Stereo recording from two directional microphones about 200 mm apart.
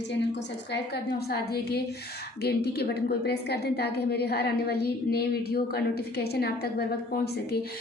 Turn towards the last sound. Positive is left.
turn(degrees=50)  # may be behind; listen again after turning